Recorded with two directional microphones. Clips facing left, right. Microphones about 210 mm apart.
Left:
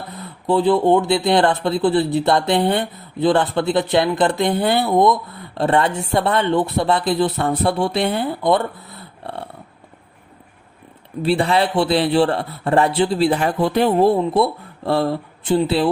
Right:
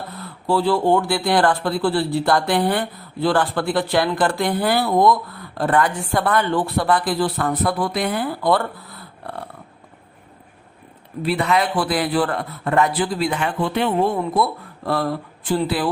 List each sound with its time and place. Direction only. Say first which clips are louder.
0.1 s speech: left 3 dB; 20° left (ahead or behind)
11.2 s a man's voice: left 3 dB; 30° left (ahead or behind)